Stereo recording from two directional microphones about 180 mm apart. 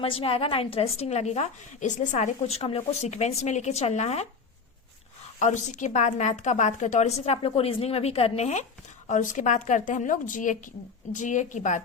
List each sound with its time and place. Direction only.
0.0 s a woman's voice: 30° left (ahead or behind)
5.4 s a woman's voice: 40° left (ahead or behind)